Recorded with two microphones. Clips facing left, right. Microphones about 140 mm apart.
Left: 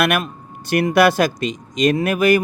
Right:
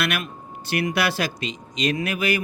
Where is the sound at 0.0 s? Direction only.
50° left (ahead or behind).